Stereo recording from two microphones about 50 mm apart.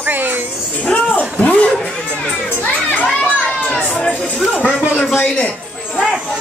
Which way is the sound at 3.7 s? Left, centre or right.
Left.